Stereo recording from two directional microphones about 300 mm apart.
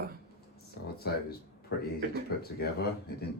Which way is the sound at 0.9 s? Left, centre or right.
Left.